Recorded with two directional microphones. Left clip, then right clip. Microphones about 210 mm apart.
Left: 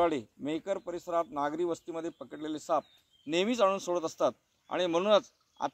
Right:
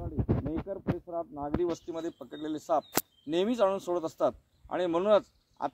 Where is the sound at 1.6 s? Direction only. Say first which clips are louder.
Right 1 dB; 10° right (ahead or behind).